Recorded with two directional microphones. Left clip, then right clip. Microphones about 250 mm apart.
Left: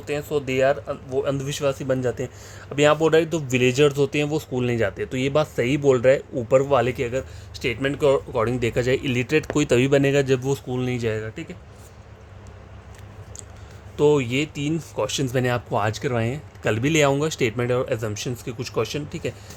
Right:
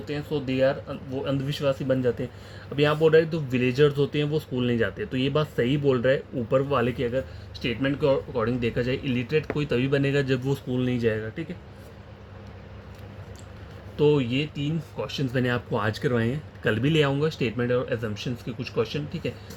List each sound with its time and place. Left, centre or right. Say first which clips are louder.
0.1 s speech: left 5 dB; left
7.6 s speech: left 4 dB; left
14.0 s speech: left 3 dB; left
15.3 s speech: left 3 dB; left